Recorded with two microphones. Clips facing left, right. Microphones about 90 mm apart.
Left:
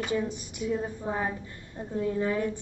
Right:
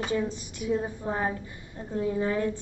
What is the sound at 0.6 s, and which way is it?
A woman's voice, 15° right (ahead or behind).